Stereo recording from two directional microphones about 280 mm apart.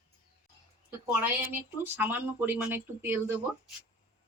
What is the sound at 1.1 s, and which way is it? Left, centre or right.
Speech, centre.